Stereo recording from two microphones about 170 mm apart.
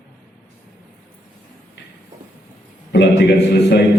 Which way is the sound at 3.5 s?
75° left (ahead or behind).